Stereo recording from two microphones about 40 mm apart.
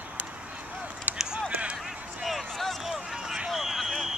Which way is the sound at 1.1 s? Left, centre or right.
Right.